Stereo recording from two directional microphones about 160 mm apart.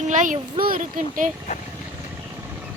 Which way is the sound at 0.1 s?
55° right (ahead or behind).